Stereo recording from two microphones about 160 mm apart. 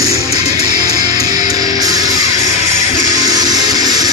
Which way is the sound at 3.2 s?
25° right (ahead or behind).